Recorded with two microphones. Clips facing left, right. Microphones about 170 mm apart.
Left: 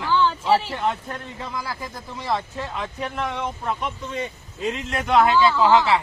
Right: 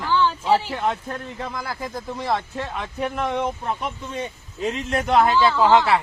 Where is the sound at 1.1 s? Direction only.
40° right (ahead or behind).